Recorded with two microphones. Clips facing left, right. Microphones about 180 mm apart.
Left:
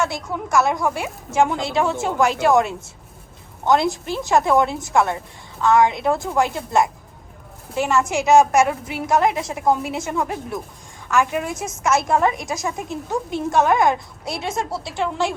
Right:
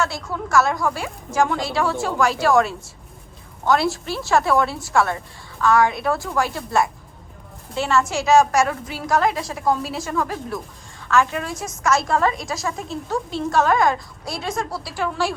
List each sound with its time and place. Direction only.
0.0 s a woman's voice: 20° left (ahead or behind)